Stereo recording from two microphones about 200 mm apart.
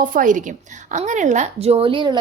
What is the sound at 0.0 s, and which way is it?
A woman's voice, 40° right (ahead or behind).